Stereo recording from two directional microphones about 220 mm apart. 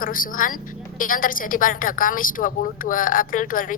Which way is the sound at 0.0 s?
40° left (ahead or behind).